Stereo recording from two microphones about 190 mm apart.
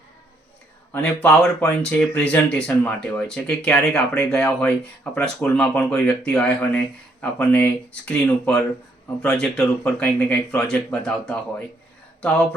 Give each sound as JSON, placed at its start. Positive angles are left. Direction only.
{"t": 0.9, "sound": "speech", "side_deg": 5}